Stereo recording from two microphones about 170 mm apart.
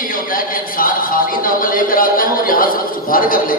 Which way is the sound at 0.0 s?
55° left (ahead or behind).